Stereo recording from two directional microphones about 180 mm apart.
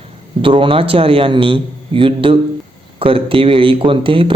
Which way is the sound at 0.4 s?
30° right (ahead or behind).